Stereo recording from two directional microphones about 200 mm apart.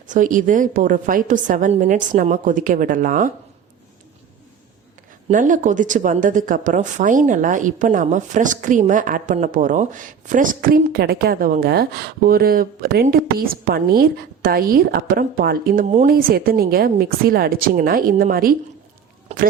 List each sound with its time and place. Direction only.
0.1 s a woman's voice: 40° right (ahead or behind)
5.3 s speech: 40° right (ahead or behind)